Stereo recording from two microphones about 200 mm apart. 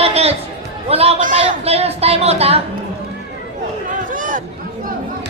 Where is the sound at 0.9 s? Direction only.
30° right (ahead or behind).